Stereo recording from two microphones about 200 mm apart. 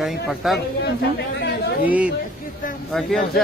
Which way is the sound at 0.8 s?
55° left (ahead or behind).